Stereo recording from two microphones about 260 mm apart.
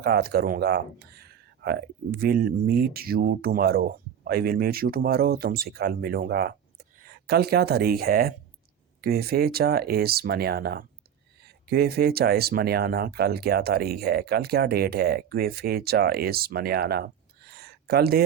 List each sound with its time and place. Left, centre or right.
0.0 s speech: right